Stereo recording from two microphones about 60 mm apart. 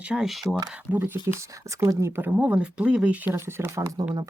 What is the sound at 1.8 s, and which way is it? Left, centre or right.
Speech, right.